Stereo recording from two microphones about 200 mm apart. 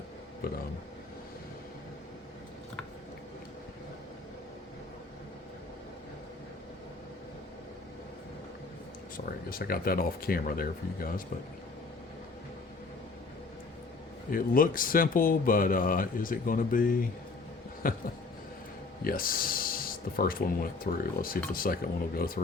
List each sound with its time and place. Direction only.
9.1 s speech: 45° left (ahead or behind)
14.3 s speech: 45° left (ahead or behind)
19.0 s speech: 45° left (ahead or behind)